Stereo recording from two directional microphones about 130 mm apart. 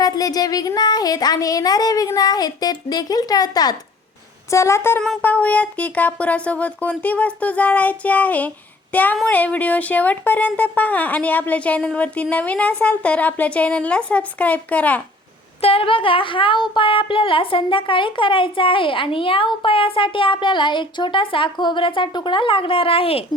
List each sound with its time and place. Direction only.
0.0 s speech: 30° left (ahead or behind); by 15.0 s 10° left (ahead or behind)
15.6 s speech: 45° left (ahead or behind)